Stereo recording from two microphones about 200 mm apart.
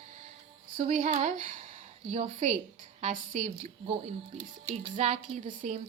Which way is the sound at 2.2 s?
30° right (ahead or behind).